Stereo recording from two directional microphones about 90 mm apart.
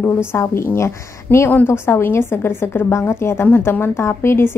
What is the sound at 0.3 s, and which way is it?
A woman's voice, 30° left (ahead or behind).